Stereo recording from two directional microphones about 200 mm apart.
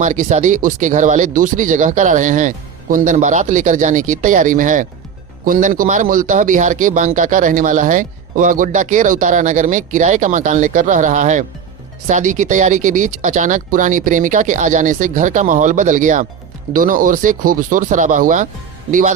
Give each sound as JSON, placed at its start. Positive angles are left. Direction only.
{"t": 0.0, "sound": "a man's voice", "side_deg": -40}